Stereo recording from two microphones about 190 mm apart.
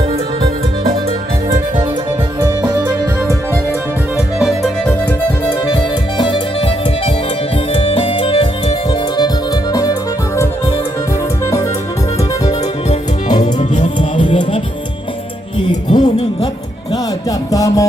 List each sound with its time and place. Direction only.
1.5 s music: 30° right (ahead or behind)
2.4 s music: 20° right (ahead or behind)
4.4 s music: centre (ahead or behind)
5.7 s music: 25° left (ahead or behind)
13.4 s music: 40° left (ahead or behind)
15.9 s music: 25° left (ahead or behind)